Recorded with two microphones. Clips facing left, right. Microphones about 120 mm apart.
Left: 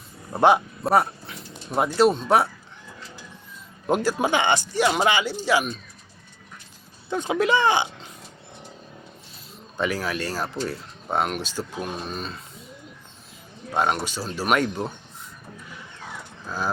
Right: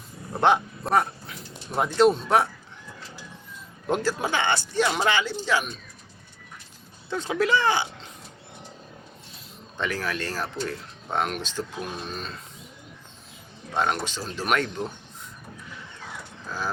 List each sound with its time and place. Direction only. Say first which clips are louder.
0.4 s speech: left 3 dB; 10° left (ahead or behind)
3.8 s speech: left 3 dB; 15° left (ahead or behind)
7.1 s speech: left 2 dB; 15° left (ahead or behind)
9.7 s speech: left 3 dB; 10° left (ahead or behind)
13.7 s speech: left 2 dB; 10° left (ahead or behind)